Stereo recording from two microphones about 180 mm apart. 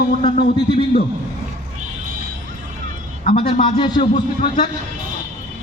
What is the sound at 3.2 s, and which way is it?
Speech, 30° left (ahead or behind).